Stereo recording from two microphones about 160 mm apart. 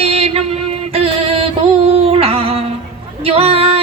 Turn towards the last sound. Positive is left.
turn(degrees=-35)  # may be behind; listen again after turning